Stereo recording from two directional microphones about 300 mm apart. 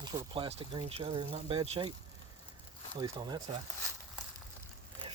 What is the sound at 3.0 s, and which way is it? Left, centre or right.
Speech, centre.